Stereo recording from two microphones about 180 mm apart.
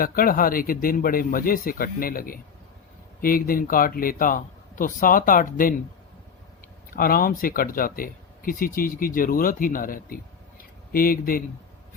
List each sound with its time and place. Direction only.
0.0 s speech: 55° left (ahead or behind)
6.9 s speech: 55° left (ahead or behind)
10.6 s a sound: 55° left (ahead or behind)